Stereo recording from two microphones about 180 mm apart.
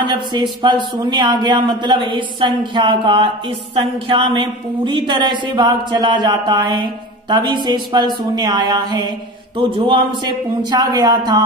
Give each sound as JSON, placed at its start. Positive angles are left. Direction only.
{"t": 0.0, "sound": "speech", "side_deg": -25}